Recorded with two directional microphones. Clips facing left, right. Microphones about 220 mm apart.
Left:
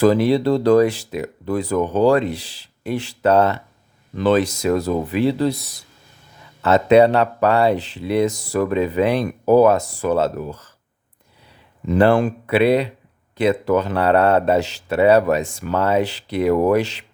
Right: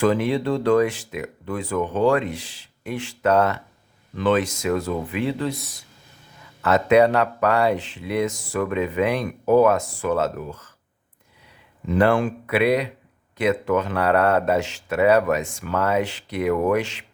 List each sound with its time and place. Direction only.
0.0 s speech: 35° left (ahead or behind)
11.9 s speech: 35° left (ahead or behind)